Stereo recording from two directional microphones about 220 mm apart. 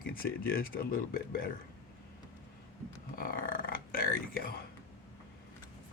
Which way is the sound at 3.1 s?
40° left (ahead or behind).